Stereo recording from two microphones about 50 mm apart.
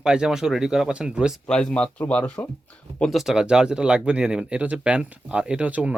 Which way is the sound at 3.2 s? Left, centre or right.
Centre.